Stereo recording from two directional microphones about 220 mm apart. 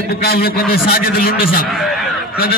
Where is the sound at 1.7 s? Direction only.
Centre (ahead or behind).